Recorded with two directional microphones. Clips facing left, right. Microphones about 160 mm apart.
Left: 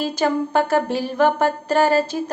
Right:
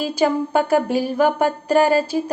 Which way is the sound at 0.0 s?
10° right (ahead or behind).